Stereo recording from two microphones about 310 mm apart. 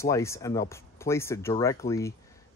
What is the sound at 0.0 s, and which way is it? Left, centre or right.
Speech, centre.